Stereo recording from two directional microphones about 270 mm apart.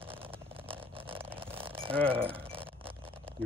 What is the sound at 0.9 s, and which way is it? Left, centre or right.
Vehicle, centre.